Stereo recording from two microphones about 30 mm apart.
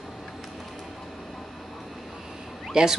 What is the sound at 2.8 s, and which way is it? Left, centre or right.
Speech, right.